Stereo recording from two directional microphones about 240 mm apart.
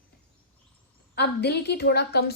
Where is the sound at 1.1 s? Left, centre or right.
Left.